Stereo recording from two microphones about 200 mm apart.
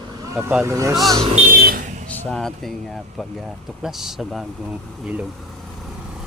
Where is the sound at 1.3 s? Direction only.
45° right (ahead or behind).